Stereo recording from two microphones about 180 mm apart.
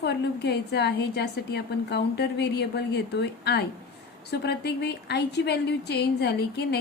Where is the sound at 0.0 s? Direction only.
65° left (ahead or behind).